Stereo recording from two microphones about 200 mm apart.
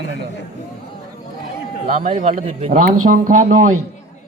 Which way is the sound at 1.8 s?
45° right (ahead or behind).